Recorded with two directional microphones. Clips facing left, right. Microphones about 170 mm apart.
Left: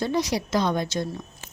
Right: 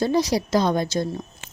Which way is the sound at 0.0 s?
35° right (ahead or behind).